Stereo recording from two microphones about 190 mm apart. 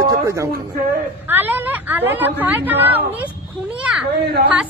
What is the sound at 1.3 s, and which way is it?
A woman's voice, 10° right (ahead or behind).